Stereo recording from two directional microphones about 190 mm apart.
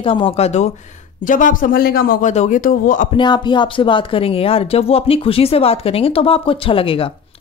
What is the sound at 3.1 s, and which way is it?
Speech, 25° left (ahead or behind).